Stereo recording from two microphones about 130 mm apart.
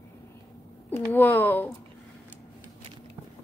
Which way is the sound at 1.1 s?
15° left (ahead or behind).